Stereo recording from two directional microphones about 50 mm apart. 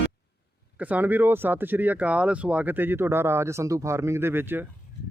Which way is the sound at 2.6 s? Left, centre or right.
Right.